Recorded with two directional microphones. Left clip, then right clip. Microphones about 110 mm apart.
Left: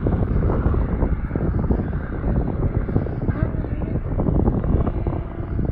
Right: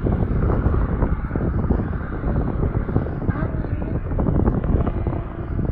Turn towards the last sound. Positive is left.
turn(degrees=45)  # may be behind; listen again after turning